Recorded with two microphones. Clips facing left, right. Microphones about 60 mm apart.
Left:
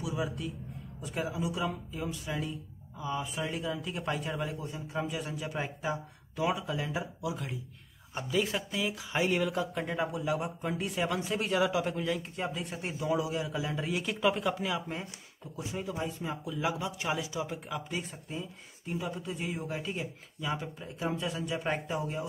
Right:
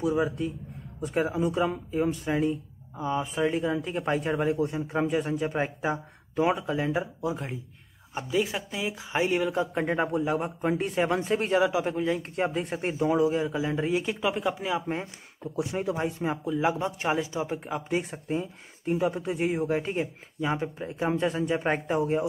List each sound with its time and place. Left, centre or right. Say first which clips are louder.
0.0 s speech: right 8 dB; right
4.6 s speech: right 12 dB; right
5.1 s speech: right 9 dB; right
8.1 s speech: right 3 dB; centre; by 11.7 s right
11.7 s speech: right 4 dB; right
12.2 s speech: right 7 dB; right
14.2 s speech: left 3 dB; centre
14.6 s speech: right 5 dB; right
15.5 s speech: right 8 dB; right
16.3 s speech: right 8 dB; right
18.1 s speech: right 9 dB; right